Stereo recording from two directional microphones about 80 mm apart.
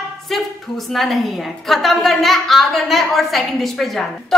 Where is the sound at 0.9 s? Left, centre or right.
Centre.